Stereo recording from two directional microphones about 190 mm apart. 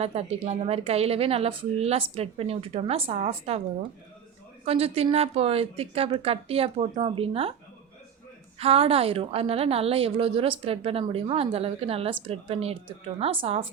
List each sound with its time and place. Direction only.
0.0 s a woman's voice: 35° right (ahead or behind)
4.6 s a woman's voice: 30° right (ahead or behind)
8.5 s a woman's voice: 30° right (ahead or behind)